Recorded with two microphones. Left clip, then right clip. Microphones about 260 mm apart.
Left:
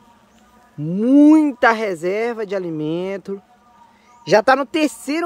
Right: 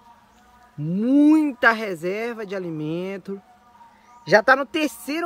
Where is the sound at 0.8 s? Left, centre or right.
Centre.